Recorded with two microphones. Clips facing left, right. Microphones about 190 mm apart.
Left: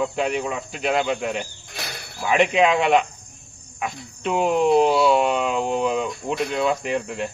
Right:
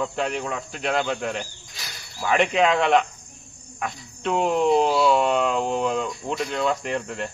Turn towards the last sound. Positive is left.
turn(degrees=5)  # may be behind; listen again after turning